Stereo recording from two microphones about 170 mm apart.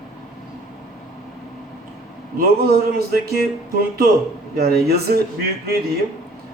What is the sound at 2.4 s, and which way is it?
Speech, 65° right (ahead or behind).